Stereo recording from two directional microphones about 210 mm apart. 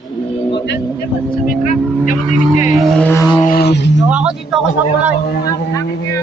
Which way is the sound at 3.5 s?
50° left (ahead or behind).